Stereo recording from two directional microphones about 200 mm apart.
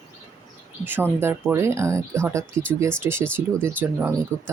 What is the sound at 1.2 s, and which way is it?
Speech, 10° right (ahead or behind).